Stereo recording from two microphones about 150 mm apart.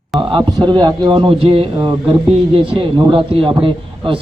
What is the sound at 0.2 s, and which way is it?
A man's voice, 35° right (ahead or behind).